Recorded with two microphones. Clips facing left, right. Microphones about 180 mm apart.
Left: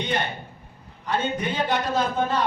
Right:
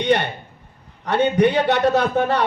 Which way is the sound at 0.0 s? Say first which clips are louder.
Right 8 dB; 70° right (ahead or behind).